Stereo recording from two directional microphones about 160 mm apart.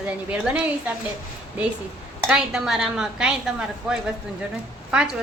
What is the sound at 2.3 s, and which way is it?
A woman's voice, 5° right (ahead or behind).